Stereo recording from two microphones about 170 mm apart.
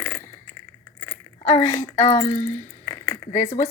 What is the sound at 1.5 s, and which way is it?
Speech, 25° left (ahead or behind).